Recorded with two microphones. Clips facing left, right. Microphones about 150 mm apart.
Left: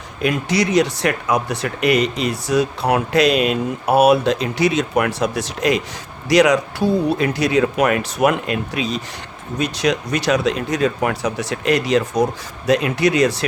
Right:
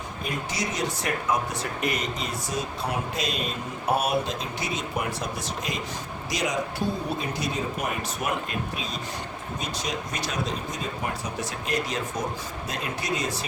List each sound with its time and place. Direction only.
0.2 s speech: 80° left